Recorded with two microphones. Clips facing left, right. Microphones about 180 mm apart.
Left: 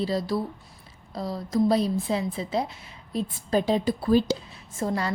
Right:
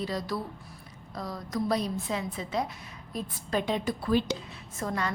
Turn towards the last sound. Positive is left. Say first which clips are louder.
# left 4 dB
turn(degrees=30)  # may be behind; listen again after turning